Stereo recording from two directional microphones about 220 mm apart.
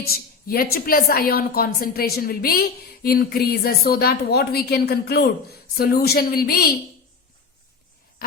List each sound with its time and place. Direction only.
0.0 s a woman's voice: 45° left (ahead or behind)